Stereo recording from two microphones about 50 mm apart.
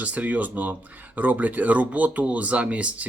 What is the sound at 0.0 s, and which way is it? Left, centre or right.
Speech, right.